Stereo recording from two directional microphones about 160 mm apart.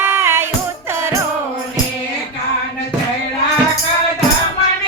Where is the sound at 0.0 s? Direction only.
15° right (ahead or behind).